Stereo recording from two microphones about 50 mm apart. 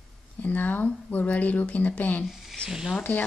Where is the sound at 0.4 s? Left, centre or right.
Left.